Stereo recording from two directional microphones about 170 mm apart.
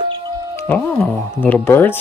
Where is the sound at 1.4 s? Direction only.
10° left (ahead or behind).